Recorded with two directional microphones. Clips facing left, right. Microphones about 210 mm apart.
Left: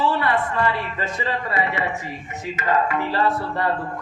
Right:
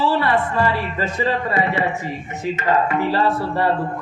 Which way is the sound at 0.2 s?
35° right (ahead or behind).